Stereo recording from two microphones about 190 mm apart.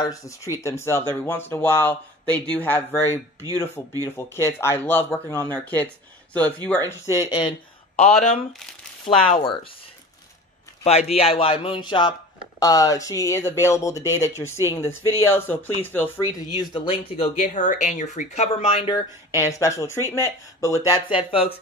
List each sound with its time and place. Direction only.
0.0 s speech: 15° left (ahead or behind)
3.0 s speech: 15° right (ahead or behind)
3.5 s speech: 10° left (ahead or behind)
6.9 s speech: 15° left (ahead or behind)
8.0 s speech: 35° left (ahead or behind)
10.8 s speech: 35° left (ahead or behind); by 16.3 s 10° left (ahead or behind)
16.5 s speech: 25° left (ahead or behind)
19.5 s speech: 15° left (ahead or behind)